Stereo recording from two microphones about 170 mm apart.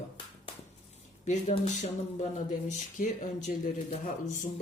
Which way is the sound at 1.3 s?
45° left (ahead or behind).